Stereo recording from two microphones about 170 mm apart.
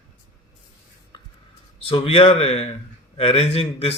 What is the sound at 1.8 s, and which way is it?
Speech, 35° left (ahead or behind).